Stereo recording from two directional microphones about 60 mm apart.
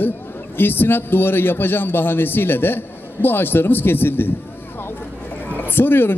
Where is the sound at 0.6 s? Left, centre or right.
Left.